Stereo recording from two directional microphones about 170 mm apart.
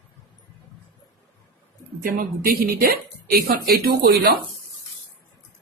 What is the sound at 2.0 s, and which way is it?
A woman's voice, 60° right (ahead or behind).